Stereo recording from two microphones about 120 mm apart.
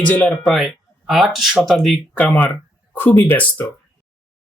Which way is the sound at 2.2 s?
15° left (ahead or behind).